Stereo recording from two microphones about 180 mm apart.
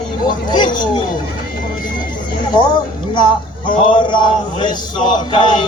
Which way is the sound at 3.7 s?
25° left (ahead or behind).